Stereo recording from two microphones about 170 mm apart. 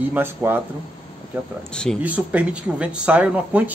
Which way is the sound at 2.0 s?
10° right (ahead or behind).